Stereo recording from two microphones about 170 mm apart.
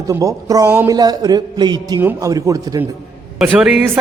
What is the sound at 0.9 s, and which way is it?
A man's voice, 25° right (ahead or behind).